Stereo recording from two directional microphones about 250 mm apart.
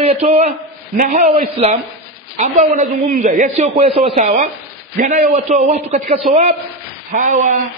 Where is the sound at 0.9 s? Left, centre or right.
Right.